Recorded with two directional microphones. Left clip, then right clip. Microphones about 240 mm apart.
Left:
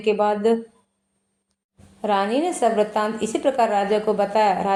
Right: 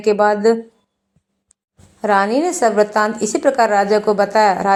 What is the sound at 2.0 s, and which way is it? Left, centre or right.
A woman's voice, right.